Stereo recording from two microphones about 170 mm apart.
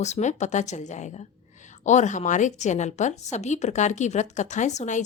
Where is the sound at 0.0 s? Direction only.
45° left (ahead or behind).